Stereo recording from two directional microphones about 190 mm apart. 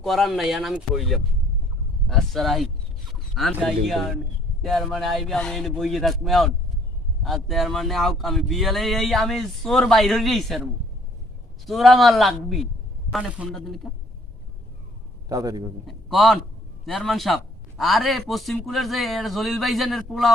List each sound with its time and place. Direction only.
0.0 s a man's voice: centre (ahead or behind)
11.6 s a man's voice: centre (ahead or behind)
15.3 s a man's voice: 20° right (ahead or behind)
15.9 s a man's voice: centre (ahead or behind)